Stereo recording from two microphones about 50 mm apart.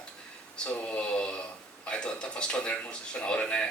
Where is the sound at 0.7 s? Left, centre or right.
Left.